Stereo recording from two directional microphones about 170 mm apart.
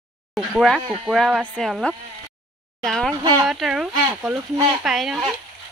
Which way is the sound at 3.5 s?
Centre (ahead or behind).